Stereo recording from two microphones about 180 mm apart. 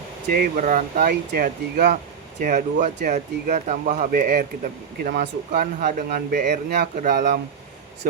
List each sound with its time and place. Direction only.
0.3 s speech: 50° right (ahead or behind)